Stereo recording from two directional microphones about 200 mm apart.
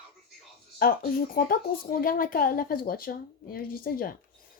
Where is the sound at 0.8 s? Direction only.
45° left (ahead or behind).